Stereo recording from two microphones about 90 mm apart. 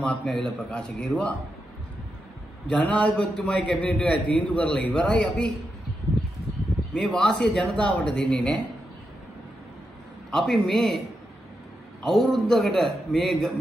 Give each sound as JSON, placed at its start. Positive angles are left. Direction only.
{"t": 0.2, "sound": "a man's voice", "side_deg": 5}
{"t": 2.7, "sound": "a man's voice", "side_deg": 15}
{"t": 6.9, "sound": "a man's voice", "side_deg": 10}
{"t": 10.3, "sound": "a man's voice", "side_deg": 5}
{"t": 12.0, "sound": "a man's voice", "side_deg": 0}